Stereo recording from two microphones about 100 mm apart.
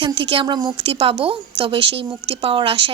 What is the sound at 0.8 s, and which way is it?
A woman's voice, 70° right (ahead or behind).